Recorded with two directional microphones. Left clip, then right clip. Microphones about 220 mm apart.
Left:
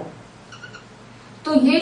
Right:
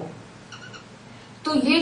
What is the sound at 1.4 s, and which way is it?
Speech, centre (ahead or behind).